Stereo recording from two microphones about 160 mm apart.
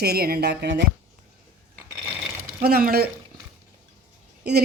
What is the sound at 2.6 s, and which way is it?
Speech, 75° right (ahead or behind).